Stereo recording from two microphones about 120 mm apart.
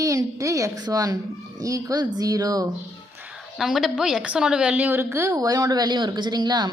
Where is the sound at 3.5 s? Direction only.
Centre (ahead or behind); by 6.7 s 35° right (ahead or behind).